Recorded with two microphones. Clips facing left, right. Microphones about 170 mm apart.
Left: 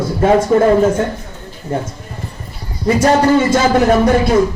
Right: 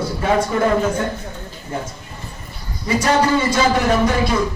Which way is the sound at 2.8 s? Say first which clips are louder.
Left 5 dB; 50° left (ahead or behind).